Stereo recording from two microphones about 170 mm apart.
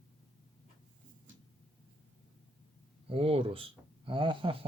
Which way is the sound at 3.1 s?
35° right (ahead or behind).